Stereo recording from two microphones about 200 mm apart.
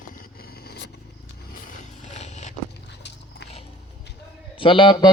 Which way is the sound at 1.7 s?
35° left (ahead or behind).